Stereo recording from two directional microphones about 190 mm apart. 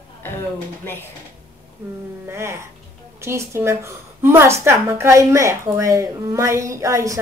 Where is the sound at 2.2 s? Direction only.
15° right (ahead or behind).